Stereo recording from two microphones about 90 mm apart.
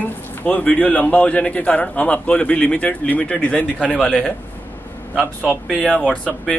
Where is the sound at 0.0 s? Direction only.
20° left (ahead or behind).